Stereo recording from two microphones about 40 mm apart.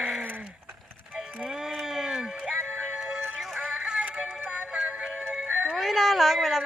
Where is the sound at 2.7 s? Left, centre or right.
Right.